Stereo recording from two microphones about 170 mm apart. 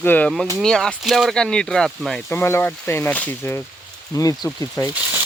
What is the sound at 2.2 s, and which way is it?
Speech, 15° left (ahead or behind).